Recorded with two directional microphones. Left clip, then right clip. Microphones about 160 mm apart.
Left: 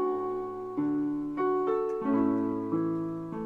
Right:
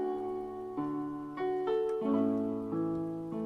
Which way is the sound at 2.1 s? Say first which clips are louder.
Left 4 dB; 35° right (ahead or behind).